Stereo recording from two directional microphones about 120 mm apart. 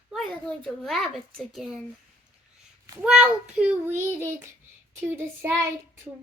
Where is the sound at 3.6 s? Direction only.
20° right (ahead or behind).